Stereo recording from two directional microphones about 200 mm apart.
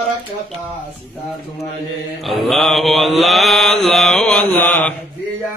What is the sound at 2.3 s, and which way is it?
Mantra, centre (ahead or behind).